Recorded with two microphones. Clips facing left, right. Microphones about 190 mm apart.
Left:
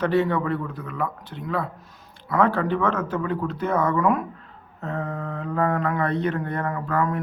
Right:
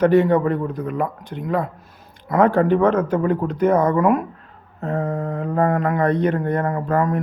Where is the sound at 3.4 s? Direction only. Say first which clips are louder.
Right 7 dB; 15° right (ahead or behind).